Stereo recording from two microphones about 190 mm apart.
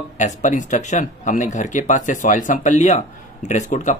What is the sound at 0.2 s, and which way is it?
A man's voice, 40° left (ahead or behind).